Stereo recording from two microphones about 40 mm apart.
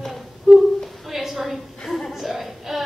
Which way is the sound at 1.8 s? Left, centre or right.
Centre.